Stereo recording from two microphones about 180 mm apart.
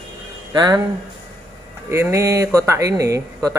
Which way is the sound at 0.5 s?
25° right (ahead or behind).